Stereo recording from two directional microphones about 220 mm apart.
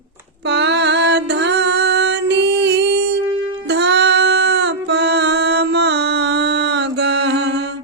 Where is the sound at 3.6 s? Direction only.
50° right (ahead or behind).